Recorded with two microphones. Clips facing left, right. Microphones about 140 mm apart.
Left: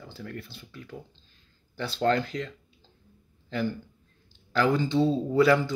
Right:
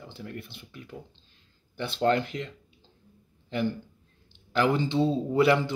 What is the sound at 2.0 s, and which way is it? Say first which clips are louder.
Speech: even; 20° right (ahead or behind).